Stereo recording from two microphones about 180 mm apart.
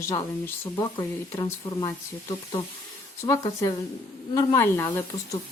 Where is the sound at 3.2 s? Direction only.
15° left (ahead or behind).